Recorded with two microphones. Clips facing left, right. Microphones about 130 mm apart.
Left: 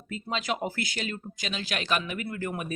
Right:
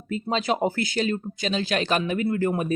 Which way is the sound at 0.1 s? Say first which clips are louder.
Right 6 dB; 35° right (ahead or behind).